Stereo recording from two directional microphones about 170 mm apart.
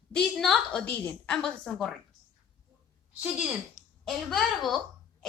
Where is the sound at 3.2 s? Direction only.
Centre (ahead or behind).